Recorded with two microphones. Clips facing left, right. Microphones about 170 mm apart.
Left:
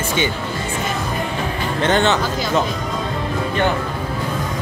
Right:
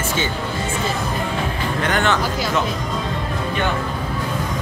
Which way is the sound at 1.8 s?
25° left (ahead or behind).